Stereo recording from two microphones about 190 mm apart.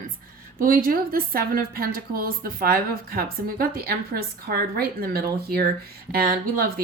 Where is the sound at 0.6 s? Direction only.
50° right (ahead or behind).